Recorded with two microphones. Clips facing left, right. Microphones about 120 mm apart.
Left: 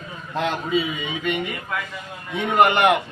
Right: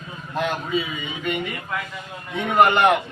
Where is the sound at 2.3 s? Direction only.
15° left (ahead or behind).